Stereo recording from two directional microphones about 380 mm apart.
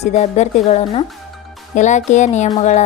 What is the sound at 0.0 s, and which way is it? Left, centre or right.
A woman's voice, centre.